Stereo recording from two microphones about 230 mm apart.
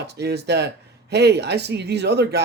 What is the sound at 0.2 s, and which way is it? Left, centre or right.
Speech, right.